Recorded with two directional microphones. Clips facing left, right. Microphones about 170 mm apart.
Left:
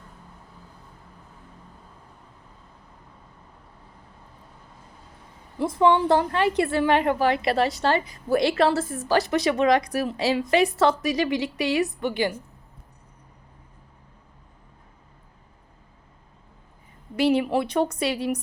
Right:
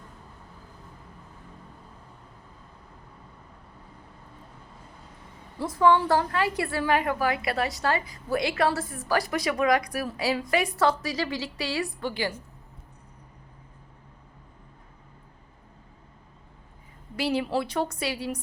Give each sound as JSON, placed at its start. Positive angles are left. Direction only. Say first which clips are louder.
{"t": 5.5, "sound": "a woman's voice", "louder": "left 2 dB", "side_deg": 20}
{"t": 17.2, "sound": "a woman's voice", "louder": "left 5 dB", "side_deg": 20}